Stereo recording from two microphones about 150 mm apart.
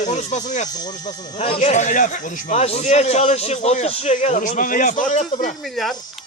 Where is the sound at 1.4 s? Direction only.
45° left (ahead or behind).